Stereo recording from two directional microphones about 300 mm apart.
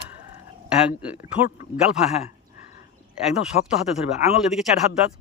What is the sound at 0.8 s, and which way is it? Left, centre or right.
Speech, centre.